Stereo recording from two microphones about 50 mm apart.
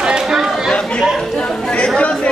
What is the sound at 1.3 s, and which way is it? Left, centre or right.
Chatter, centre.